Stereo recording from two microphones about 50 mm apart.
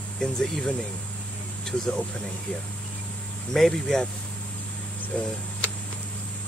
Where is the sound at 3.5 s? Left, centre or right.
Centre.